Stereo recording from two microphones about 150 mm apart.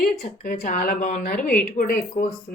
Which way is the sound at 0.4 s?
65° left (ahead or behind).